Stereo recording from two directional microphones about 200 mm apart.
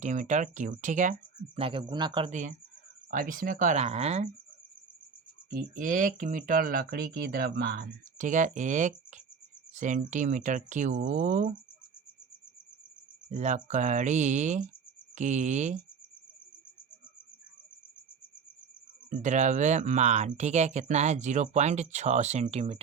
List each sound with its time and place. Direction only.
0.0 s speech: 40° right (ahead or behind)
1.5 s speech: 25° right (ahead or behind)
3.1 s speech: 45° right (ahead or behind)
5.5 s speech: 45° right (ahead or behind)
13.3 s speech: 35° right (ahead or behind)
19.1 s speech: 35° right (ahead or behind)